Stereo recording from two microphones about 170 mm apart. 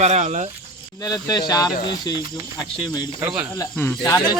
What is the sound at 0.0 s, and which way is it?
Speech, 40° right (ahead or behind).